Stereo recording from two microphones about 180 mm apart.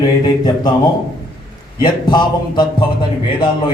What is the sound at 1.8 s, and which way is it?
A man's voice, 25° left (ahead or behind).